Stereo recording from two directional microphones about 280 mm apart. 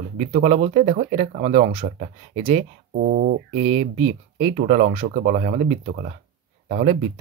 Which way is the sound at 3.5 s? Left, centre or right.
Right.